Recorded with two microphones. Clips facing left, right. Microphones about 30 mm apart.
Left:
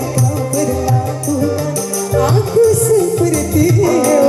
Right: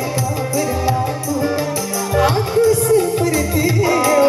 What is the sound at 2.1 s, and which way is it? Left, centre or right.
Music, right.